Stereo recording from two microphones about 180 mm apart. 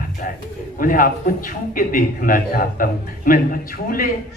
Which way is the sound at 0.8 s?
50° left (ahead or behind).